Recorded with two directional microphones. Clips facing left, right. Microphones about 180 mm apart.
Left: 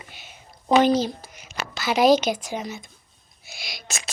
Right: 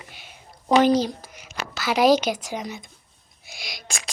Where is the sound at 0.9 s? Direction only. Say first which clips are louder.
Right 1 dB; 10° right (ahead or behind).